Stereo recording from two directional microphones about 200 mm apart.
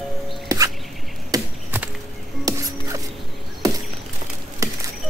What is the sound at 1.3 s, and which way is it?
Chop, 10° right (ahead or behind).